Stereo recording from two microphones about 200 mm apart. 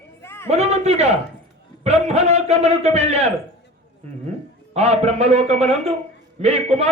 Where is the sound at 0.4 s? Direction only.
35° right (ahead or behind).